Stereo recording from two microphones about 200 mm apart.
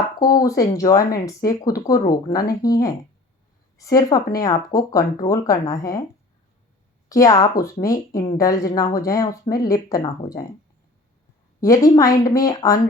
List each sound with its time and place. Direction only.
0.2 s a woman's voice: 15° left (ahead or behind)
7.1 s a woman's voice: 15° left (ahead or behind)
11.6 s a woman's voice: 15° left (ahead or behind)